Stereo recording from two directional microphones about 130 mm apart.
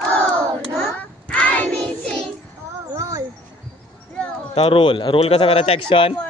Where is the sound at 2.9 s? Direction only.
25° right (ahead or behind).